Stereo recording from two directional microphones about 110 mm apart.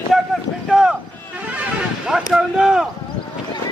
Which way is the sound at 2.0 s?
5° right (ahead or behind).